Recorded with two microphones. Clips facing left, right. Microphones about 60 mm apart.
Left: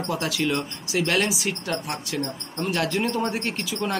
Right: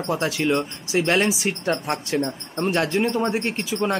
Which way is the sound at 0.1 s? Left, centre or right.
Right.